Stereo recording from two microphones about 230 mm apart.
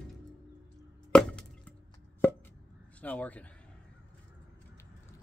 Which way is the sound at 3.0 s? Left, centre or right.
Centre.